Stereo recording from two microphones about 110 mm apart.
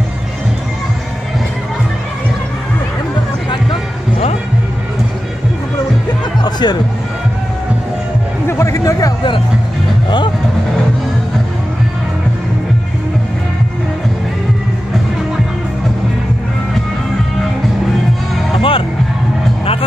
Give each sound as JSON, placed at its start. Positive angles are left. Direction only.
{"t": 6.4, "sound": "music", "side_deg": 40}
{"t": 8.5, "sound": "music", "side_deg": 25}
{"t": 10.0, "sound": "music", "side_deg": 45}
{"t": 18.6, "sound": "music", "side_deg": 55}